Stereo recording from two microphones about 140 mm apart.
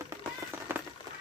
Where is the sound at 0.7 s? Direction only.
15° right (ahead or behind).